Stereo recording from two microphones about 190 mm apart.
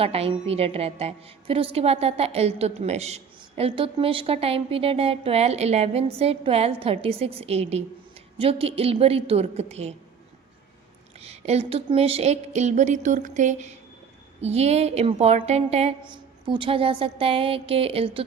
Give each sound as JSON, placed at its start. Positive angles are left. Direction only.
{"t": 0.0, "sound": "a woman's voice", "side_deg": -30}
{"t": 11.2, "sound": "a woman's voice", "side_deg": -35}